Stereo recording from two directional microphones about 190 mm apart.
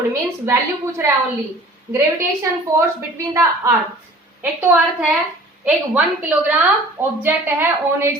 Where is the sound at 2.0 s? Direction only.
15° right (ahead or behind).